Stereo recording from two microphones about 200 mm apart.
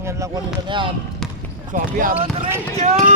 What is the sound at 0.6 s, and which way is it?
Speech, 25° right (ahead or behind).